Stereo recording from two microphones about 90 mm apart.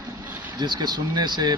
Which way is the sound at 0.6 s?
55° right (ahead or behind).